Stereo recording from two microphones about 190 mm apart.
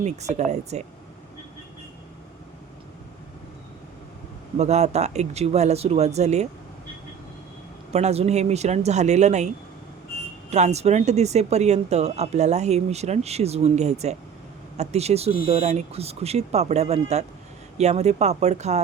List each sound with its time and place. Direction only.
0.0 s speech: 35° right (ahead or behind)
4.5 s speech: 35° right (ahead or behind)
7.9 s speech: 35° right (ahead or behind)
10.5 s speech: 35° right (ahead or behind)